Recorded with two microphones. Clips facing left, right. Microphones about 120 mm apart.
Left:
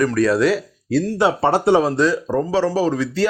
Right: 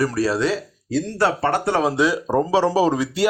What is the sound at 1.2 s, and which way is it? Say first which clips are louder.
Speech: left 2 dB; 25° left (ahead or behind).